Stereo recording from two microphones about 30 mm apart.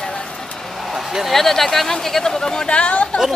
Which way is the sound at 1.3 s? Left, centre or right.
Centre.